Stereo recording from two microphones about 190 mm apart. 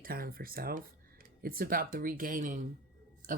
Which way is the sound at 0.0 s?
50° right (ahead or behind).